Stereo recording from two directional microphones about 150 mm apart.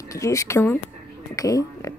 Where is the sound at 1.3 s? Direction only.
25° left (ahead or behind).